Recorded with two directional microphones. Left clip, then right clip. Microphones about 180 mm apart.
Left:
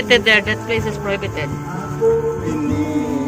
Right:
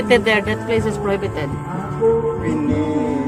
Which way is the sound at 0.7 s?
20° right (ahead or behind).